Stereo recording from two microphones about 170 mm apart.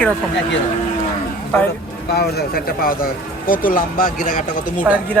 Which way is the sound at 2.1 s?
70° left (ahead or behind).